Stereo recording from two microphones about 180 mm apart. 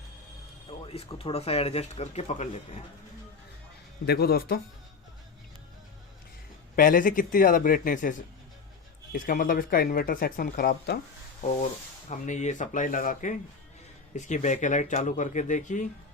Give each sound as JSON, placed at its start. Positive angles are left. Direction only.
{"t": 0.7, "sound": "speech", "side_deg": 30}
{"t": 4.0, "sound": "speech", "side_deg": 60}
{"t": 6.7, "sound": "speech", "side_deg": 50}
{"t": 9.1, "sound": "speech", "side_deg": 50}
{"t": 11.3, "sound": "speech", "side_deg": 40}